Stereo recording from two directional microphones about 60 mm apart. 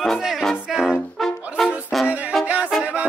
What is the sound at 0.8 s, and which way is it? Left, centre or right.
Brass instrument, centre.